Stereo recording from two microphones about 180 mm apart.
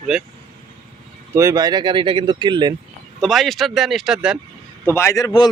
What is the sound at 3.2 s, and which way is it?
Speech, centre (ahead or behind).